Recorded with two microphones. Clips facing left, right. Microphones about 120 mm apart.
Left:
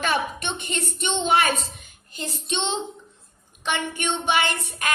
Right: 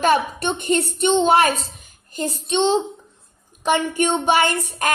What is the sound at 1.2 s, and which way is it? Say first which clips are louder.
Child singing: right 5 dB; 40° right (ahead or behind).